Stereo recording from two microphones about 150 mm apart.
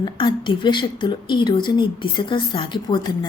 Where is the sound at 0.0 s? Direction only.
30° left (ahead or behind).